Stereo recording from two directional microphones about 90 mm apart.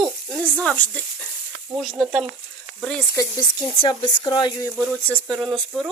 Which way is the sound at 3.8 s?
70° left (ahead or behind).